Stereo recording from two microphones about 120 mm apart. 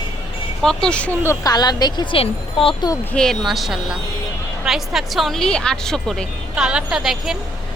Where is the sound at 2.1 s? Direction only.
50° left (ahead or behind).